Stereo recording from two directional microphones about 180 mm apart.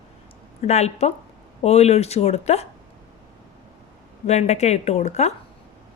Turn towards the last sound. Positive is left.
turn(degrees=40)  # may be behind; listen again after turning